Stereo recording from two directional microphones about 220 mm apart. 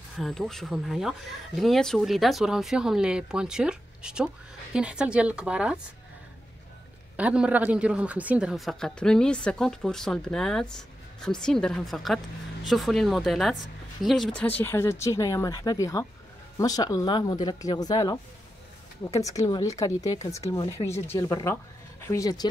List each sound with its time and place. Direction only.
0.2 s speech: centre (ahead or behind)
7.2 s speech: 5° right (ahead or behind); by 22.5 s 15° left (ahead or behind)